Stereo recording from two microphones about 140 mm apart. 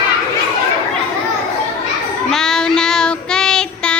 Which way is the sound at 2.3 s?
5° left (ahead or behind).